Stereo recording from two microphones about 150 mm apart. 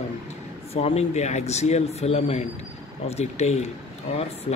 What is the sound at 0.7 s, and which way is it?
Speech, 45° left (ahead or behind).